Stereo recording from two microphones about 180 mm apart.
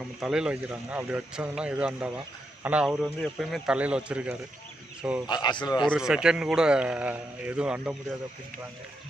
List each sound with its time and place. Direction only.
0.2 s speech: 5° right (ahead or behind)
5.3 s speech: 25° left (ahead or behind)
5.9 s a man's voice: 5° right (ahead or behind)